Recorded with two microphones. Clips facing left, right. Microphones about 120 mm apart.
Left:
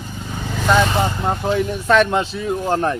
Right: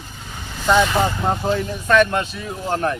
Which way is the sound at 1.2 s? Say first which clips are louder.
Left 1 dB; 5° left (ahead or behind).